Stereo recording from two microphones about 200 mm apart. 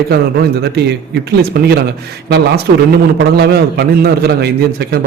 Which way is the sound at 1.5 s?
55° right (ahead or behind).